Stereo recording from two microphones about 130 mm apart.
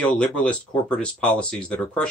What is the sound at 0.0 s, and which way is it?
Speech, 10° left (ahead or behind).